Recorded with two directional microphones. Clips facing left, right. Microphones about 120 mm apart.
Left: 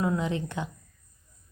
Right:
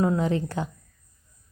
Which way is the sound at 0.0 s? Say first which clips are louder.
Right 4 dB; 40° right (ahead or behind).